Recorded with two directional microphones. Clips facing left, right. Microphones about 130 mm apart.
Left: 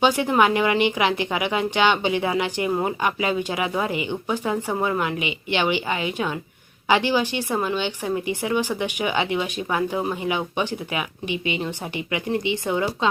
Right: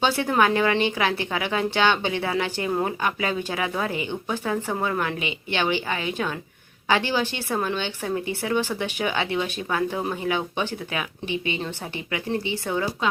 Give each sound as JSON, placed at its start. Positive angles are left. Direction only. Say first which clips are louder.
{"t": 0.0, "sound": "a woman's voice", "louder": "left 2 dB", "side_deg": 15}